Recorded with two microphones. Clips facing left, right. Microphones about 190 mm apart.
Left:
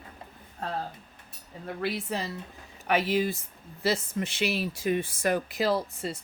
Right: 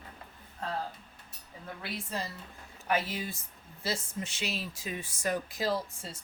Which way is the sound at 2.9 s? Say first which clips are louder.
Left 7 dB; 70° left (ahead or behind).